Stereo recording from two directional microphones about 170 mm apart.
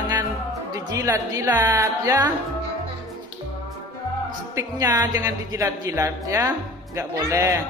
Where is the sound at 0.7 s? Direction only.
20° right (ahead or behind).